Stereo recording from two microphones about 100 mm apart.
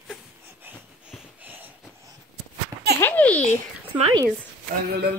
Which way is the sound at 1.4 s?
20° right (ahead or behind).